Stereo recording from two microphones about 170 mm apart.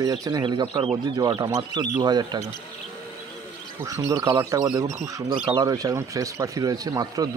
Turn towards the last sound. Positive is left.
turn(degrees=-20)  # may be behind; listen again after turning